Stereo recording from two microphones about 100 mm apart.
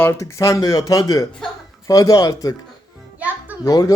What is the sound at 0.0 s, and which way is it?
Speech, 25° left (ahead or behind).